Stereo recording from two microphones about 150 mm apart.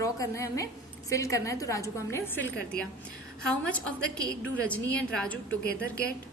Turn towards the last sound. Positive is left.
turn(degrees=90)